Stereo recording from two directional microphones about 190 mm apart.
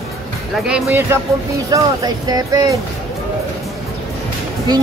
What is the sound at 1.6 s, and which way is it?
Speech, 20° right (ahead or behind).